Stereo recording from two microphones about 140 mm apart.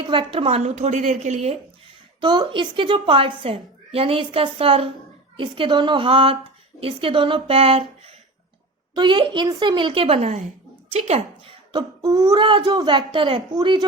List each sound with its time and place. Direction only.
0.1 s a woman's voice: 40° right (ahead or behind); by 1.5 s 55° right (ahead or behind)
2.2 s a woman's voice: 35° right (ahead or behind)
9.0 s a woman's voice: 35° right (ahead or behind)